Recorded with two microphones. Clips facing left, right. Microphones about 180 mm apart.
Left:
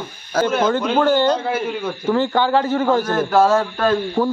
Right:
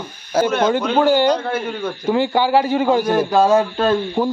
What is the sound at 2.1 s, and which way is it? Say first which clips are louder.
A man's voice: right 1 dB; 10° right (ahead or behind).